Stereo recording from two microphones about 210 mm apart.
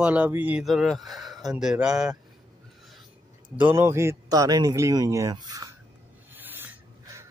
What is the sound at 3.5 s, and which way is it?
A man's voice, 10° right (ahead or behind).